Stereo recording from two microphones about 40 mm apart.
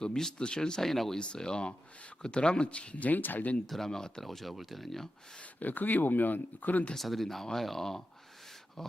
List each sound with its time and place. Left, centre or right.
0.0 s speech: centre
0.9 s speech: centre
1.2 s speech: left
3.7 s speech: centre
4.2 s speech: centre
5.5 s speech: left
6.9 s speech: centre